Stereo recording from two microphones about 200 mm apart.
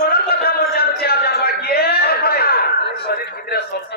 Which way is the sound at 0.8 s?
50° left (ahead or behind).